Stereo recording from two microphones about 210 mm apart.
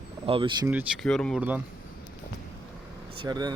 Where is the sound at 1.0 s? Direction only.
Centre (ahead or behind).